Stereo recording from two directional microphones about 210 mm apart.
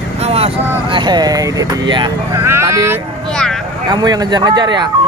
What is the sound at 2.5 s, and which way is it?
Speech, 15° right (ahead or behind).